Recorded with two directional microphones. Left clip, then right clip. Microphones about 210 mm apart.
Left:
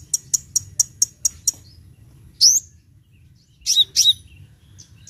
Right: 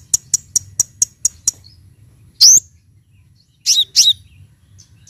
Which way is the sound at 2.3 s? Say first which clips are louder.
Right 6 dB; 30° right (ahead or behind).